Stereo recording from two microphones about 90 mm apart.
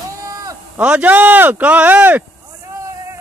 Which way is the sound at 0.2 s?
35° right (ahead or behind).